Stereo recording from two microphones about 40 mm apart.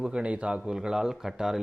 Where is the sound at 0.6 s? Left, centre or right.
Centre.